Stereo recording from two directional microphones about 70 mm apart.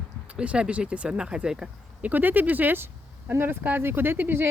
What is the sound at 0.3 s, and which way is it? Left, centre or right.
Speech, centre.